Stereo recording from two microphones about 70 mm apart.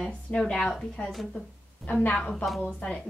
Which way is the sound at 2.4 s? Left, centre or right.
Centre.